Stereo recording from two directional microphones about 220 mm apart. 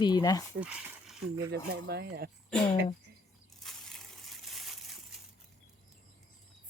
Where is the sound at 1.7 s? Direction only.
50° right (ahead or behind).